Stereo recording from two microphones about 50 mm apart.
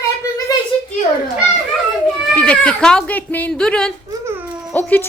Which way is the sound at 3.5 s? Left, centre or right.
Centre.